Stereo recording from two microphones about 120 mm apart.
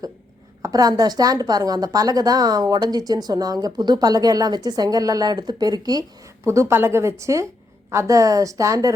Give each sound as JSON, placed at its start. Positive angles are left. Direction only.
{"t": 0.6, "sound": "a woman's voice", "side_deg": -30}